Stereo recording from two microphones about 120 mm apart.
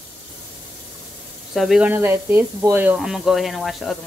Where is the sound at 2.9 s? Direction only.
5° right (ahead or behind).